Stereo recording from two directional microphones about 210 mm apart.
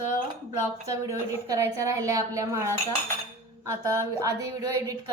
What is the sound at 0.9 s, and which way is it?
A woman's voice, 15° right (ahead or behind).